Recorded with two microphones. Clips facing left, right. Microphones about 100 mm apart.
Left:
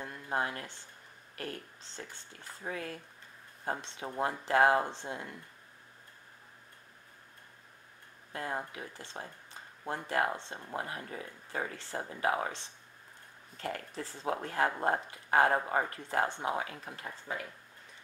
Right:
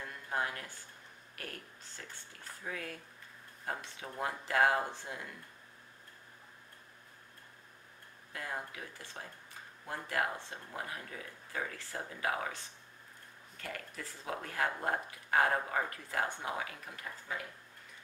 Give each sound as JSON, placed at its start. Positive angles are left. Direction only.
{"t": 0.0, "sound": "speech", "side_deg": 25}
{"t": 8.3, "sound": "speech", "side_deg": 30}